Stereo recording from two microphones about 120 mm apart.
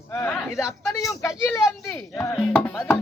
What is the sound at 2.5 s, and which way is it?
Speech, 20° left (ahead or behind).